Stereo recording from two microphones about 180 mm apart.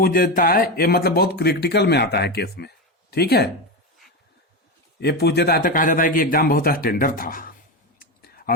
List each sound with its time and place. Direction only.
0.0 s speech: 55° left (ahead or behind)
4.9 s a man's voice: 65° left (ahead or behind)
7.9 s a sound: 55° left (ahead or behind)